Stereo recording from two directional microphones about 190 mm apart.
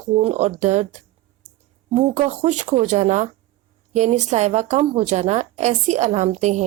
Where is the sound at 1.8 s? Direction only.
35° right (ahead or behind).